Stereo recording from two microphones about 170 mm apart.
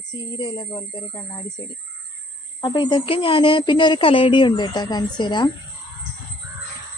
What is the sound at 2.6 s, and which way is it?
Speech, 25° left (ahead or behind).